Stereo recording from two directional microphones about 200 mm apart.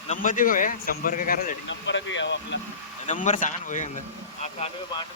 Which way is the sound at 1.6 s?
65° left (ahead or behind).